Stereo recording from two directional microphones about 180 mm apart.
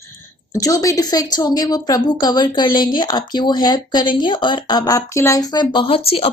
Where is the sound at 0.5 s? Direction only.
20° left (ahead or behind).